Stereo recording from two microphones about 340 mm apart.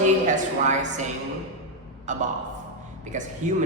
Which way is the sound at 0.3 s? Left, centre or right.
Right.